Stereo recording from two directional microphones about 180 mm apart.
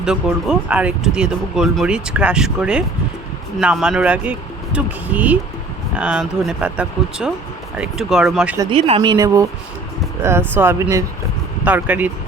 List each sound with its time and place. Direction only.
0.0 s speech: 5° right (ahead or behind)
8.7 s speech: 30° right (ahead or behind); by 12.1 s 10° right (ahead or behind)